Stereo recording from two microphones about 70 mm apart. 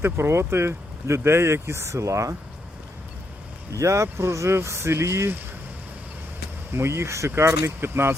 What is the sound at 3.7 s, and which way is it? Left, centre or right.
Speech, right.